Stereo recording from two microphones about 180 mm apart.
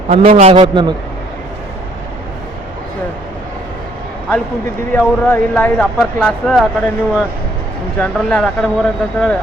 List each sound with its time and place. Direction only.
0.1 s a man's voice: 35° right (ahead or behind)
4.9 s speech: 10° left (ahead or behind)